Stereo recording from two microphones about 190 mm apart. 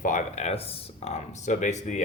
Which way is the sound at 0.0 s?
40° left (ahead or behind).